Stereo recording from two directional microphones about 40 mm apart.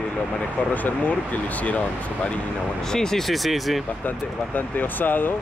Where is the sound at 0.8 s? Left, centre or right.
Left.